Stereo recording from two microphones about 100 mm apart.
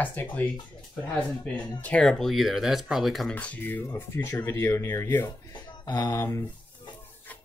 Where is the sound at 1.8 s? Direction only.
10° left (ahead or behind).